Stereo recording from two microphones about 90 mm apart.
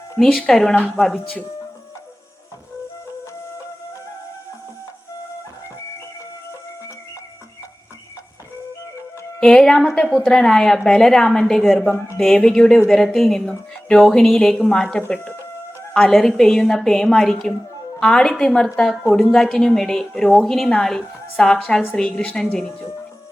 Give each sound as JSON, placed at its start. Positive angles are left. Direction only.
{"t": 0.3, "sound": "a woman's voice", "side_deg": 10}
{"t": 1.1, "sound": "a woman's voice", "side_deg": 15}
{"t": 9.4, "sound": "a woman's voice", "side_deg": 10}
{"t": 11.9, "sound": "speech", "side_deg": 20}
{"t": 12.1, "sound": "a woman's voice", "side_deg": 0}